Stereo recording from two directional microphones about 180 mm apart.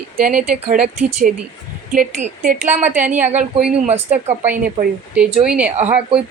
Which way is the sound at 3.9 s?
40° right (ahead or behind).